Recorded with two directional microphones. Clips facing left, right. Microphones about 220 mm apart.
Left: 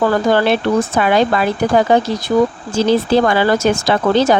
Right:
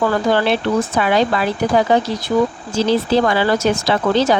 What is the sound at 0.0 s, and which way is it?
Speech, 45° left (ahead or behind).